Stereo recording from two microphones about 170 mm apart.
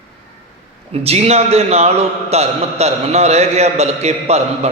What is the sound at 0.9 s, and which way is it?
A man's voice, 35° right (ahead or behind).